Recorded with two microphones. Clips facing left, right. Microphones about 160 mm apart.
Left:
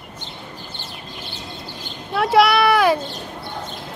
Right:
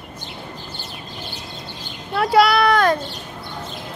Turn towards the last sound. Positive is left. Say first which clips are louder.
# left 1 dB
turn(degrees=5)  # may be behind; listen again after turning